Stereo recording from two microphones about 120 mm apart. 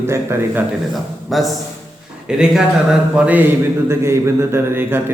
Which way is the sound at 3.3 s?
15° right (ahead or behind).